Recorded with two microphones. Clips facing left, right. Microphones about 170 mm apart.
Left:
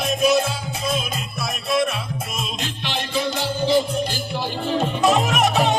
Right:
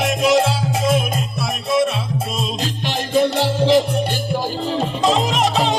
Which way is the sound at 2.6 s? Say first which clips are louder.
Right 4 dB; 45° right (ahead or behind).